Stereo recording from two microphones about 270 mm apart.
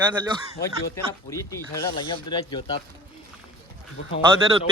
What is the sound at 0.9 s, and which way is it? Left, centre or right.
Speech, centre.